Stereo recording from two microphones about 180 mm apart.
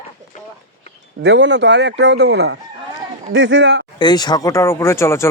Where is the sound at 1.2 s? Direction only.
85° right.